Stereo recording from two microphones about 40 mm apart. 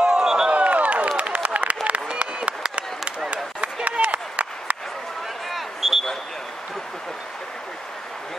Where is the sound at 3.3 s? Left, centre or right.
Right.